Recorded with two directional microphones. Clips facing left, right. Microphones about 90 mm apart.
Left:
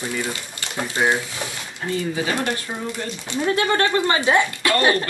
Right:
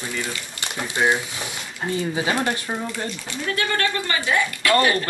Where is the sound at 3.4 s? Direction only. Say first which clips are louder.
Left 4 dB; 30° left (ahead or behind).